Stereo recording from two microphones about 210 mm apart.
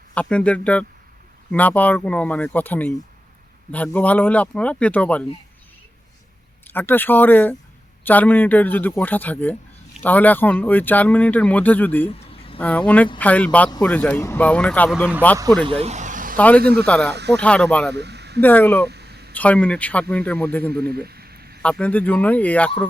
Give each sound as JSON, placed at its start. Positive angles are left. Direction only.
{"t": 0.1, "sound": "speech", "side_deg": 5}
{"t": 6.7, "sound": "speech", "side_deg": 10}
{"t": 15.6, "sound": "vehicle", "side_deg": -30}
{"t": 16.4, "sound": "speech", "side_deg": 5}
{"t": 17.1, "sound": "speech", "side_deg": -55}
{"t": 17.3, "sound": "speech", "side_deg": 5}
{"t": 17.9, "sound": "a sound", "side_deg": -55}
{"t": 18.3, "sound": "speech", "side_deg": 10}
{"t": 18.9, "sound": "a sound", "side_deg": -50}
{"t": 19.3, "sound": "speech", "side_deg": 5}
{"t": 20.9, "sound": "a sound", "side_deg": -50}
{"t": 21.6, "sound": "speech", "side_deg": 5}